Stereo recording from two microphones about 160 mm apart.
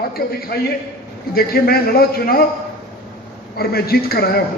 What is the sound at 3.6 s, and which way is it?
Speech, 75° left (ahead or behind).